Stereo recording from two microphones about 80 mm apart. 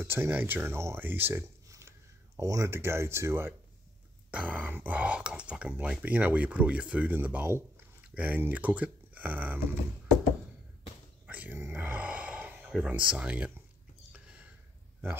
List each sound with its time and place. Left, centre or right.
0.0 s speech: right
1.7 s a sound: right
2.7 s speech: right
4.3 s speech: centre
11.2 s dog: centre
11.5 s a sound: right
12.9 s speech: centre